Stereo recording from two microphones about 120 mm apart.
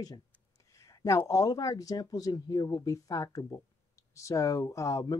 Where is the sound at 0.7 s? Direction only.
25° left (ahead or behind).